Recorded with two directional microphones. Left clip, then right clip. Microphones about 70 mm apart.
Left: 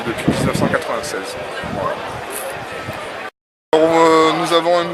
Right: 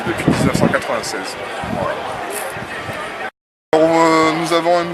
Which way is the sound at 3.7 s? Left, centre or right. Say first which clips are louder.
Left 1 dB; centre.